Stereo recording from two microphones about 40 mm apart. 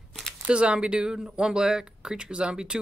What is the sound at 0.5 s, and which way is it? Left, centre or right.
Speech, right.